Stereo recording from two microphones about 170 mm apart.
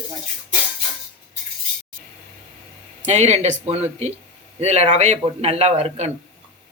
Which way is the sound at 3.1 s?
40° right (ahead or behind).